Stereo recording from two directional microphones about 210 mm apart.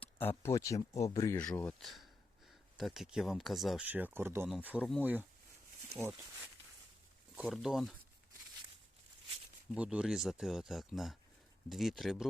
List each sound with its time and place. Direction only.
0.0 s speech: 10° left (ahead or behind)
1.4 s speech: 5° left (ahead or behind)
4.8 s speech: 10° left (ahead or behind)
6.0 s speech: 10° right (ahead or behind)
9.7 s speech: 5° right (ahead or behind)